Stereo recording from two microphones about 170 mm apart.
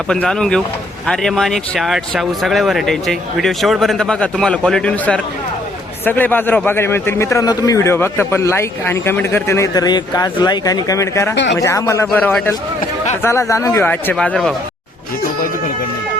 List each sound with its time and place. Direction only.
0.1 s a man's voice: 5° left (ahead or behind)